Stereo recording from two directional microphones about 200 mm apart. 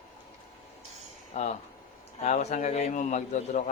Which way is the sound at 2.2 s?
35° left (ahead or behind).